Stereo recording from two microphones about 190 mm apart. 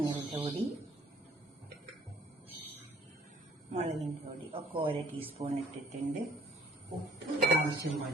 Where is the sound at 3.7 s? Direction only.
35° right (ahead or behind).